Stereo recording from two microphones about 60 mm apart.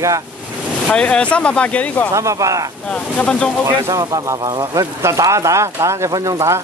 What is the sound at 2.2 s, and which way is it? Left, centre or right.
Speech, right.